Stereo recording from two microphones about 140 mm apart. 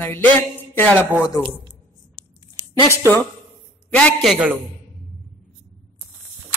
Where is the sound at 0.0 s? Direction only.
15° left (ahead or behind).